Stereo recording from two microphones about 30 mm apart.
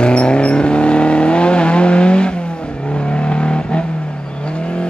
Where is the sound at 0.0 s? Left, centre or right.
Left.